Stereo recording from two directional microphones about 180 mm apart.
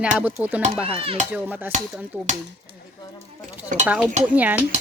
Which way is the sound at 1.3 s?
10° right (ahead or behind).